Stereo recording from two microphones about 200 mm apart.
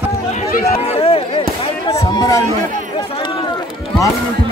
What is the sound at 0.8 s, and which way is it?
Speech, 30° left (ahead or behind).